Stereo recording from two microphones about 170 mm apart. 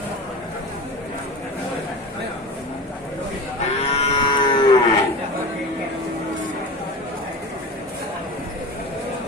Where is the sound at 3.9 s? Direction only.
35° left (ahead or behind).